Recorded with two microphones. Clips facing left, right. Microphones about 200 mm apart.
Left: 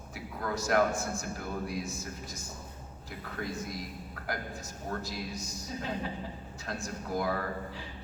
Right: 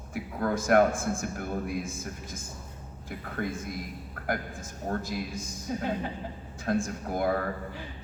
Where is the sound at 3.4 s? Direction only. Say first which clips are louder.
Right 5 dB; 60° right (ahead or behind).